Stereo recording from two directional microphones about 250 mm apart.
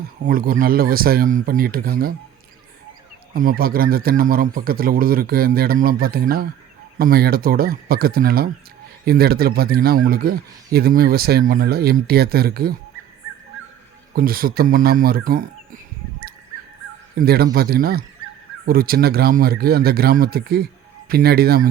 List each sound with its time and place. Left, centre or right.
0.3 s speech: right
3.3 s speech: right
14.2 s speech: right
17.2 s speech: right